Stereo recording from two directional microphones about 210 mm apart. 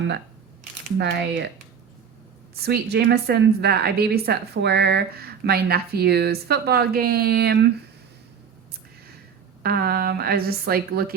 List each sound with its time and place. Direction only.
0.9 s a woman's voice: 55° right (ahead or behind)
2.6 s a woman's voice: 50° right (ahead or behind)
9.6 s a woman's voice: 45° right (ahead or behind)